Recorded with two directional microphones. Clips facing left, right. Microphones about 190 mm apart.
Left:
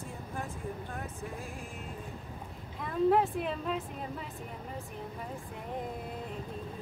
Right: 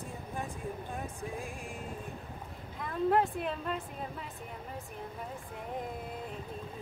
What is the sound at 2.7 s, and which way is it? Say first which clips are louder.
A woman's voice: left 2 dB; centre (ahead or behind).